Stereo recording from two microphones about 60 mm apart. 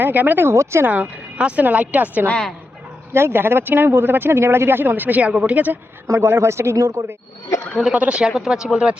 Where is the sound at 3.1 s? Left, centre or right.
Right.